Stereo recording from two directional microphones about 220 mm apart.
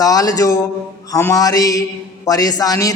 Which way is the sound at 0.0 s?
15° left (ahead or behind).